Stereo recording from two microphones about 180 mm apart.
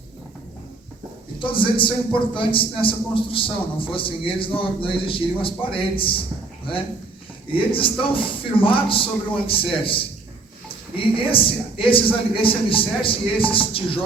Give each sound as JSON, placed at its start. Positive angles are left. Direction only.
{"t": 1.4, "sound": "a man's voice", "side_deg": 30}
{"t": 7.5, "sound": "a man's voice", "side_deg": 30}